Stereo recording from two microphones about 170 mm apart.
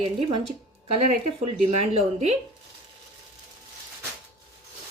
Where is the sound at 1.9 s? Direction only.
35° right (ahead or behind).